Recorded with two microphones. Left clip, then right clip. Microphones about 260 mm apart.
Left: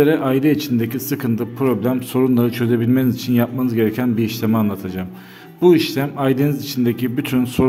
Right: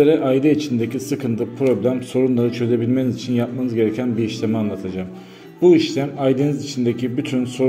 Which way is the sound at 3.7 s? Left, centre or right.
Left.